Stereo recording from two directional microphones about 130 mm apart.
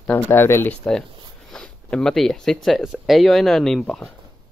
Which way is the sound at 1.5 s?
5° left (ahead or behind).